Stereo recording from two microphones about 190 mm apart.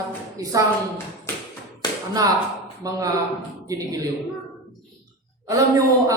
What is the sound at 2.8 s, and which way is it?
A man's voice, 20° right (ahead or behind).